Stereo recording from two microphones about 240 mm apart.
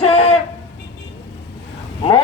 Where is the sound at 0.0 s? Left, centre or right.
Left.